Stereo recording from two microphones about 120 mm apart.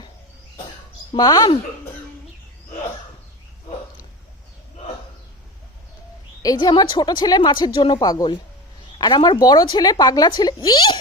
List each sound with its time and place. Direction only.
1.1 s speech: 30° left (ahead or behind)
6.4 s speech: 35° left (ahead or behind)
7.9 s speech: 30° left (ahead or behind)